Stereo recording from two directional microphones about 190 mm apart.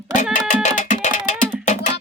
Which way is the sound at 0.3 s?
45° left (ahead or behind).